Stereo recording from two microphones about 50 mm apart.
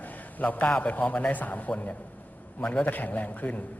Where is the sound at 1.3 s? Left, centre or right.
Left.